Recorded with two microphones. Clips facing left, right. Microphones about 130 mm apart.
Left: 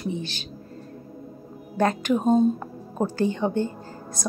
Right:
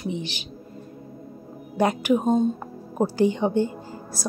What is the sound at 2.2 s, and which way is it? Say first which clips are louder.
Speech: left 5 dB; 5° left (ahead or behind).